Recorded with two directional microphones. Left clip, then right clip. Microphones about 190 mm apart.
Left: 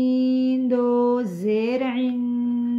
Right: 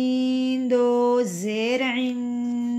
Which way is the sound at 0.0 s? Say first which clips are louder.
Left 2 dB; 35° right (ahead or behind).